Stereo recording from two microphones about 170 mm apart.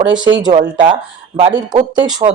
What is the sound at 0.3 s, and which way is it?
Speech, 25° right (ahead or behind).